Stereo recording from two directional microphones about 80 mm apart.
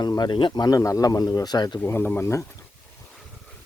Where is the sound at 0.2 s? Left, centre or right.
Left.